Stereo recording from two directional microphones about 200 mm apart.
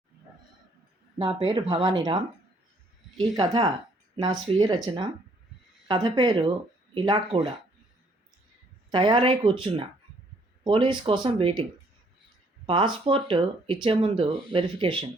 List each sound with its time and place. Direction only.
1.2 s speech: 25° right (ahead or behind)
8.9 s speech: 25° right (ahead or behind)
12.6 s speech: 25° right (ahead or behind)